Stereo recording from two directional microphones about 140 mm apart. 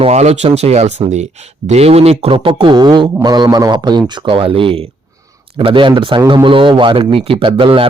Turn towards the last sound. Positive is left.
turn(degrees=-40)  # may be behind; listen again after turning